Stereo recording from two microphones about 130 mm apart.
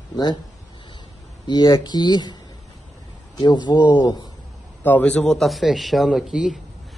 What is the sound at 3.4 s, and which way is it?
Speech, 35° left (ahead or behind).